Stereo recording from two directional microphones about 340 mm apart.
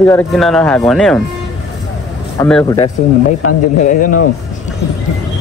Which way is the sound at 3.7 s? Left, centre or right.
Left.